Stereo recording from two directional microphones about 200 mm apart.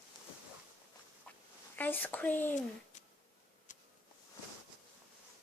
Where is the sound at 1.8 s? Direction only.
10° left (ahead or behind).